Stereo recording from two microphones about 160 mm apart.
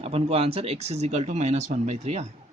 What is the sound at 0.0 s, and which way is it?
Speech, 40° right (ahead or behind).